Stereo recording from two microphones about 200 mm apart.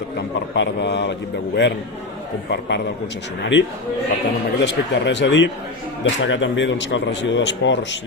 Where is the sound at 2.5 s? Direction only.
60° left (ahead or behind).